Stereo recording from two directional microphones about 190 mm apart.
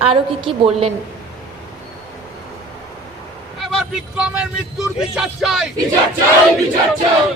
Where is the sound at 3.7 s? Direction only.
Centre (ahead or behind).